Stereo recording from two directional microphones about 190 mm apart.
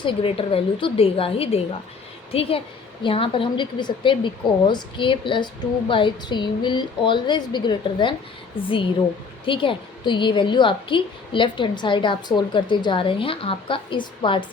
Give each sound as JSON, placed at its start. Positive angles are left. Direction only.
{"t": 0.0, "sound": "a woman's voice", "side_deg": 30}